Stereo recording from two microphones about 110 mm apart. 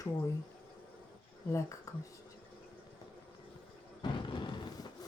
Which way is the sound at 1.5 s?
30° left (ahead or behind).